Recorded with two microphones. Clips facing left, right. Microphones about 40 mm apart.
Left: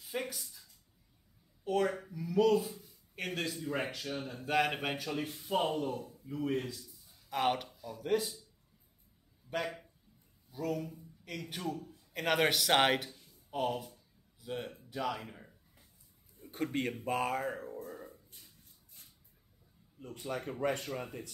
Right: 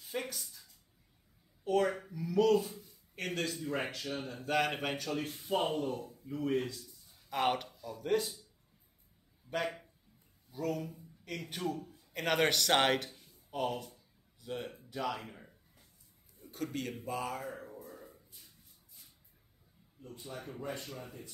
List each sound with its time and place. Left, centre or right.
0.0 s a sound: centre
1.6 s a man's voice: centre
9.5 s a man's voice: centre
16.3 s a man's voice: left
20.1 s speech: left